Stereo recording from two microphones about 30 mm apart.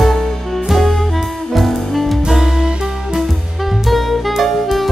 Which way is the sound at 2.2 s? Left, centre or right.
Centre.